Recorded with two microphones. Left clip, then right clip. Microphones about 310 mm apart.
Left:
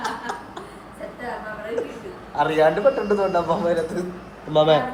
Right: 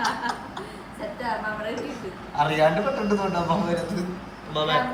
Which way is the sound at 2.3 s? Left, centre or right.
Centre.